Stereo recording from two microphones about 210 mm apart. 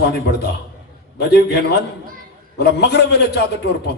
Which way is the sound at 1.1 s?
50° left (ahead or behind).